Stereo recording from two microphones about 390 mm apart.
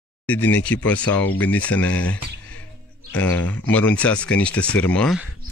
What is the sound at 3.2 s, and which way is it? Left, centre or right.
Speech, centre.